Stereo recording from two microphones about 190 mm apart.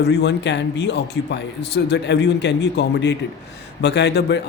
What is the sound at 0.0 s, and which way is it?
Speech, 60° left (ahead or behind).